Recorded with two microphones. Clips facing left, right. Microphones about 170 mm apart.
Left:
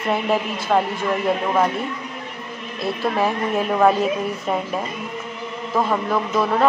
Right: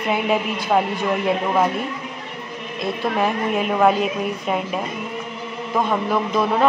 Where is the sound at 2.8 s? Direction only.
Centre (ahead or behind).